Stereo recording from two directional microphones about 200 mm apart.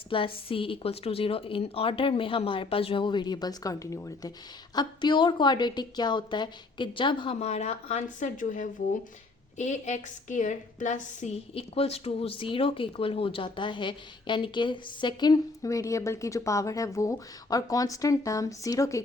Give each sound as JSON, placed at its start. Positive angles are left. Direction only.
{"t": 0.1, "sound": "a woman's voice", "side_deg": 25}